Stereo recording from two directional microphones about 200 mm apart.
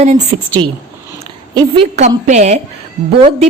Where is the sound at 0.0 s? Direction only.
35° right (ahead or behind).